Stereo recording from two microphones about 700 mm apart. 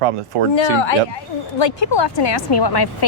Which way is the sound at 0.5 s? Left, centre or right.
Left.